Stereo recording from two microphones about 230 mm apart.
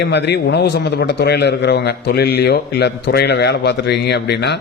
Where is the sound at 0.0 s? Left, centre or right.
Left.